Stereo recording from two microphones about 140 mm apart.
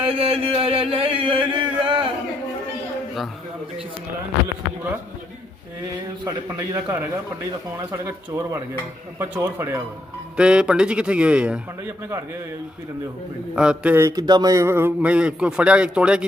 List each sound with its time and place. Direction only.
0.0 s a sound: 40° right (ahead or behind)
6.7 s a man's voice: 15° right (ahead or behind)
13.6 s a man's voice: 10° right (ahead or behind)
14.2 s a man's voice: 30° right (ahead or behind); by 16.2 s 5° right (ahead or behind)